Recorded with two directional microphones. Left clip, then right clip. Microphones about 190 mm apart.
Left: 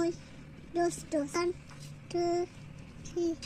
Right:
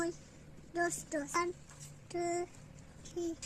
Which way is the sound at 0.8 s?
30° right (ahead or behind).